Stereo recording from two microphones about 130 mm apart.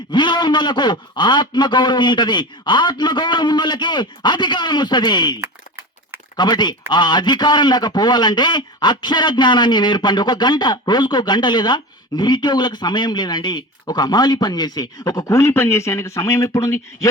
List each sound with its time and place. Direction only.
0.1 s a man's voice: 35° left (ahead or behind)